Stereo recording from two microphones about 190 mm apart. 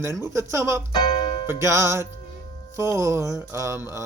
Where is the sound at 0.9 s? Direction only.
25° left (ahead or behind).